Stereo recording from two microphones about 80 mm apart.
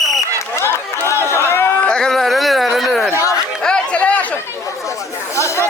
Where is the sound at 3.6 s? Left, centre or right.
Centre.